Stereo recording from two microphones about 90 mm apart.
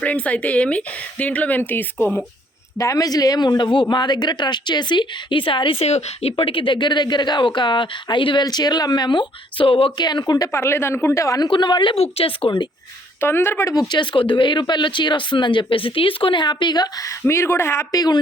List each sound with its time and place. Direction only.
0.0 s speech: 15° left (ahead or behind)
2.7 s speech: 40° left (ahead or behind); by 5.7 s 70° left (ahead or behind)
6.3 s speech: 85° left; by 8.4 s 65° left (ahead or behind)
8.4 s speech: 50° left (ahead or behind); by 9.9 s 85° left
10.0 s speech: 50° left (ahead or behind)
10.5 s speech: 30° left (ahead or behind)
11.4 s speech: 60° left (ahead or behind); by 12.5 s 90° left
13.1 s speech: 25° left (ahead or behind)
13.7 s speech: 55° left (ahead or behind)
17.2 s speech: 30° left (ahead or behind)
17.9 s speech: 45° left (ahead or behind)